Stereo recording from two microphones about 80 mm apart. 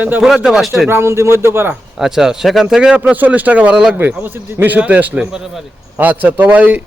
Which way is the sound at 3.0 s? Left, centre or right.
Right.